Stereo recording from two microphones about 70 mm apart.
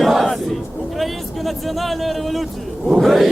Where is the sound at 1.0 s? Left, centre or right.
Centre.